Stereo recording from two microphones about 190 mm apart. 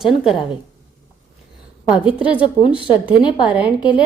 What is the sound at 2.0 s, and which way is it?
Speech, 5° right (ahead or behind).